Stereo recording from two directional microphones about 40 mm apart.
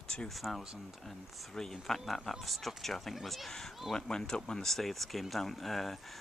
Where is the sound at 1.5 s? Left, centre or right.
Centre.